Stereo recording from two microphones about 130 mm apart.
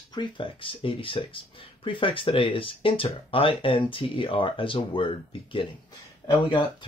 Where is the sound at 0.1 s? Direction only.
40° left (ahead or behind).